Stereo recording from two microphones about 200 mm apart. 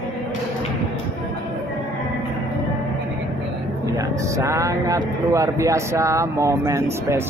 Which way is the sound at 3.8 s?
15° right (ahead or behind).